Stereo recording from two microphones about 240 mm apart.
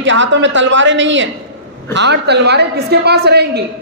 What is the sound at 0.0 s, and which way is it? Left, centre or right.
A woman's voice, right.